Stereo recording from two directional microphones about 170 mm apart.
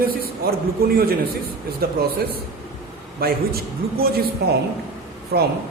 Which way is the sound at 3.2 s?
65° right (ahead or behind).